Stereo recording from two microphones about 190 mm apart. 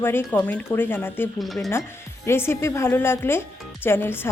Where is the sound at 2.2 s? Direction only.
15° left (ahead or behind).